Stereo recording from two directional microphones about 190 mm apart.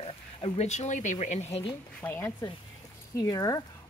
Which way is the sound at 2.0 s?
10° left (ahead or behind).